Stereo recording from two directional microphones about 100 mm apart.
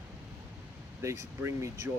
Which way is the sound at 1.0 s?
30° right (ahead or behind).